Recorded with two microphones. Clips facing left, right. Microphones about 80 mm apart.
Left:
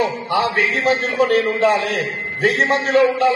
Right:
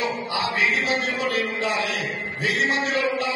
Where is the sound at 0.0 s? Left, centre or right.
Left.